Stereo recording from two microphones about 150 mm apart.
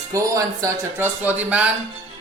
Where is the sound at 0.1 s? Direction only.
20° right (ahead or behind).